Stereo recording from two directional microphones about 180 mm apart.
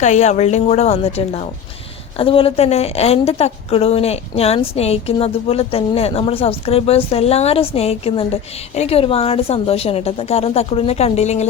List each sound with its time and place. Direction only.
0.0 s a woman's voice: 40° left (ahead or behind)